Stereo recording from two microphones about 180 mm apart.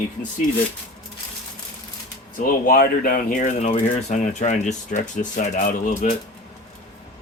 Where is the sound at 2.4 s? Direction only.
55° left (ahead or behind).